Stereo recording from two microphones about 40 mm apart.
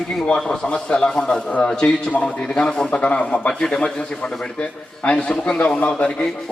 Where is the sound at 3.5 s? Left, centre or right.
Centre.